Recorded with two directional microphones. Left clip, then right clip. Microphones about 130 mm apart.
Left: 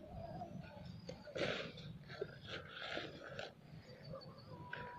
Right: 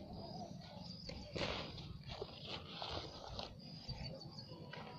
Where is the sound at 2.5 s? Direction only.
85° left.